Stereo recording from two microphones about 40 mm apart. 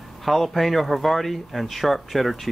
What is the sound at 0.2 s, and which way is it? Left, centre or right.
Speech, centre.